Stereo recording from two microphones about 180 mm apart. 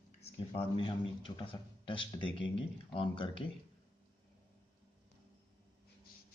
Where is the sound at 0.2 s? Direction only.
30° left (ahead or behind).